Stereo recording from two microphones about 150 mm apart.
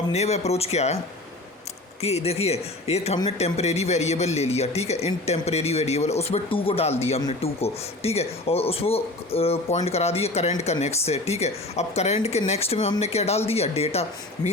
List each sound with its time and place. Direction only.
0.1 s a man's voice: 45° left (ahead or behind)
2.0 s a man's voice: 45° left (ahead or behind)